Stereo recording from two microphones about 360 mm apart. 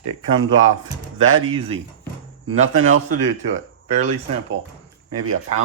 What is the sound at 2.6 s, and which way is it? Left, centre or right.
Speech, right.